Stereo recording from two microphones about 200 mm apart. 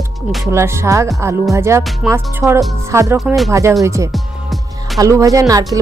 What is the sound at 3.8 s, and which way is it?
Speech, 15° right (ahead or behind).